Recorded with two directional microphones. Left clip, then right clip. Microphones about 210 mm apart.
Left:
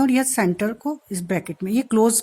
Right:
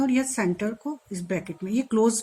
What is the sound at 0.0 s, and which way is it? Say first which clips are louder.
Speech: left 5 dB; 50° left (ahead or behind).